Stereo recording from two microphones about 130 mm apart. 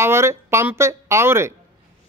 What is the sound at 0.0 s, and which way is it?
Speech, 20° right (ahead or behind).